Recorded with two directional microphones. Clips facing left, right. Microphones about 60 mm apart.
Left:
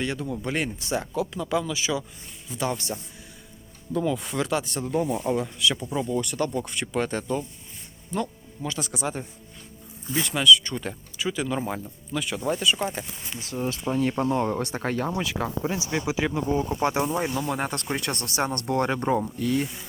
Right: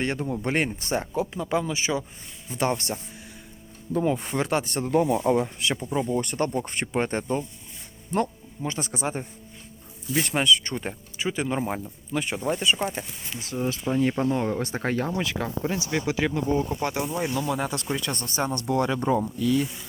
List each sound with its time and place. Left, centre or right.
0.0 s speech: right
3.9 s speech: right
5.9 s speech: right
10.2 s speech: right
13.4 s speech: centre
16.8 s speech: left
17.5 s speech: left